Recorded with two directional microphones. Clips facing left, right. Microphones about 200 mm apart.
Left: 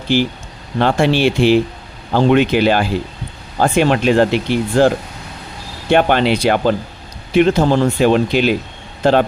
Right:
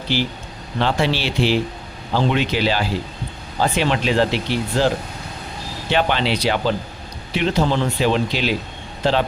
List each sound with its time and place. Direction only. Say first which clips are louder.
0.1 s speech: left 7 dB; 50° left (ahead or behind)